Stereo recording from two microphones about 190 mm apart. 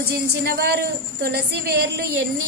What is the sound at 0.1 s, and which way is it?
A woman's voice, 55° right (ahead or behind).